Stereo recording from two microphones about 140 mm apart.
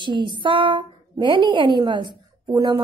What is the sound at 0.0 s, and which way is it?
A woman's voice, 35° right (ahead or behind).